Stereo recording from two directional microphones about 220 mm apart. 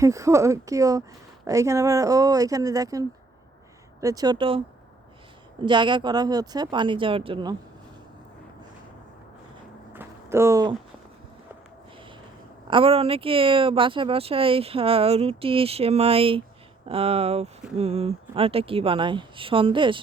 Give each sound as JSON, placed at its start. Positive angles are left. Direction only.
{"t": 0.0, "sound": "speech", "side_deg": -15}
{"t": 5.6, "sound": "speech", "side_deg": -20}
{"t": 9.9, "sound": "a sound", "side_deg": -10}
{"t": 12.7, "sound": "speech", "side_deg": -25}